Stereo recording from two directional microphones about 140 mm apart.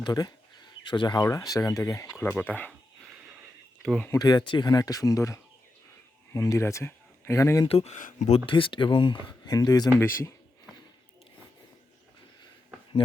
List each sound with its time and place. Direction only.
0.0 s speech: 30° left (ahead or behind)
2.2 s speech: 10° left (ahead or behind)
4.1 s speech: 30° left (ahead or behind)
7.7 s speech: 45° left (ahead or behind)
7.9 s speech: 65° left (ahead or behind)
8.4 s speech: 40° left (ahead or behind)